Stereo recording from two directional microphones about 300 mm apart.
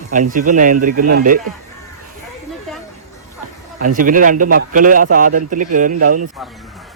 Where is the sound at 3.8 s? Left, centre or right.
Right.